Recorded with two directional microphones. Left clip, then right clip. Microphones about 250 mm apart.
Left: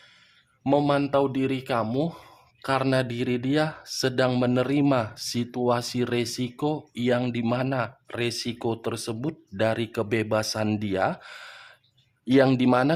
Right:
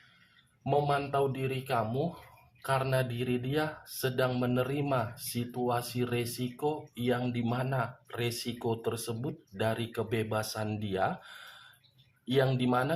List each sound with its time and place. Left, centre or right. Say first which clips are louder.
0.6 s speech: left 6 dB; left